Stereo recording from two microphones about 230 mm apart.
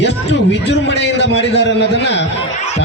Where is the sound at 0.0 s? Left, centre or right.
Left.